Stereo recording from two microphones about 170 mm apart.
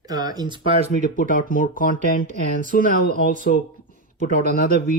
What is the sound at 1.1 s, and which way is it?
Speech, 50° left (ahead or behind).